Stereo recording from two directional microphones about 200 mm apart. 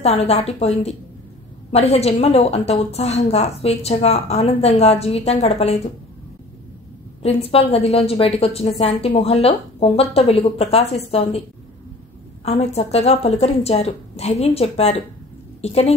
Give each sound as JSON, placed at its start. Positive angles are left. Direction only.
{"t": 0.0, "sound": "a woman's voice", "side_deg": 30}
{"t": 7.2, "sound": "a woman's voice", "side_deg": 30}
{"t": 12.4, "sound": "a woman's voice", "side_deg": 30}